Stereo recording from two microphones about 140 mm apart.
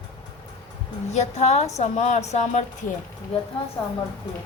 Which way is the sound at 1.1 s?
55° left (ahead or behind).